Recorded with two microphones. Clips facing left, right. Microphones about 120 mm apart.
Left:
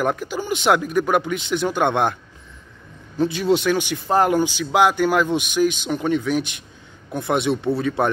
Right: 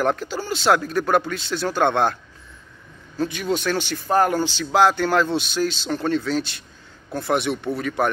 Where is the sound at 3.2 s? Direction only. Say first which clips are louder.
Left 5 dB; 25° left (ahead or behind).